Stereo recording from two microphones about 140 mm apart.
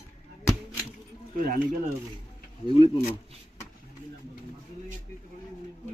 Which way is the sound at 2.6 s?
40° left (ahead or behind).